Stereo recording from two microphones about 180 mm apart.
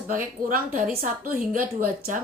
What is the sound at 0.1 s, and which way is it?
Speech, 50° right (ahead or behind).